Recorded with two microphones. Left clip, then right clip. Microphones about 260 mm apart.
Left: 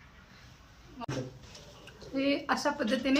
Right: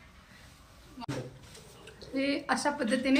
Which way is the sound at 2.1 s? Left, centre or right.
Centre.